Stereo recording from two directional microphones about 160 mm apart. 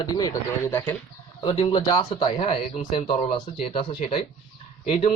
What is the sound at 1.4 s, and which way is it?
Speech, 30° left (ahead or behind).